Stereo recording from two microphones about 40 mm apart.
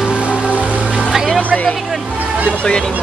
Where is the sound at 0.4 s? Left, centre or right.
Right.